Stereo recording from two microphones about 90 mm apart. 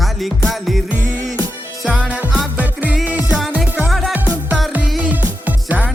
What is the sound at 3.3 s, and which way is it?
Music, centre (ahead or behind).